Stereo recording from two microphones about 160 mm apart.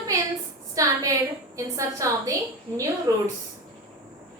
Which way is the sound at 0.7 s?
20° right (ahead or behind).